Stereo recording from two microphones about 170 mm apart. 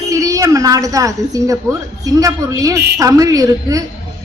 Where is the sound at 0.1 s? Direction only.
20° right (ahead or behind).